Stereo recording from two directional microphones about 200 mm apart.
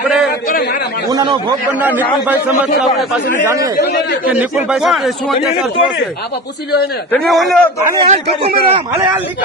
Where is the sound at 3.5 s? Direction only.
15° right (ahead or behind).